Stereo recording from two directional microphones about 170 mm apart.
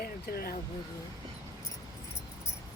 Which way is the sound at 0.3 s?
65° left (ahead or behind).